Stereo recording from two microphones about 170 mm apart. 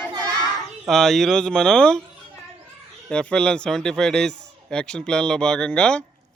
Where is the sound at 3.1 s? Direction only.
5° left (ahead or behind).